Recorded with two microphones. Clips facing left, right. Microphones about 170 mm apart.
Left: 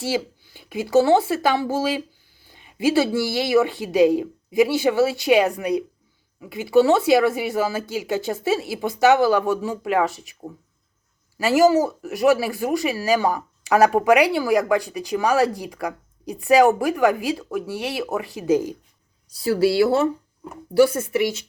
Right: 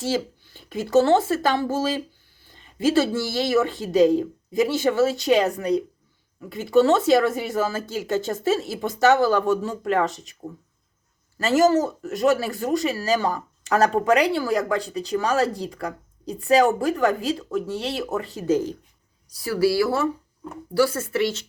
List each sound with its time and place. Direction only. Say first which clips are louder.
0.0 s speech: even; 10° left (ahead or behind)
19.3 s speech: left 2 dB; 25° left (ahead or behind)